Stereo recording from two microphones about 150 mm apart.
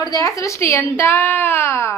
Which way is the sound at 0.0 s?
25° left (ahead or behind).